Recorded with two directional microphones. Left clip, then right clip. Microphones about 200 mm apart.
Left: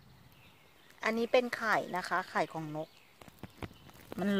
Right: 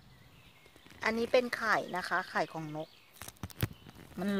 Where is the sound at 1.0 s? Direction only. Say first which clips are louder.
Even; centre (ahead or behind).